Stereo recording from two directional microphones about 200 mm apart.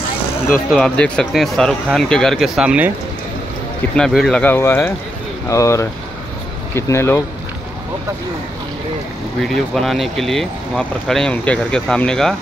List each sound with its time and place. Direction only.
0.7 s speech: 5° left (ahead or behind)
3.9 s speech: centre (ahead or behind)
9.8 s speech: centre (ahead or behind)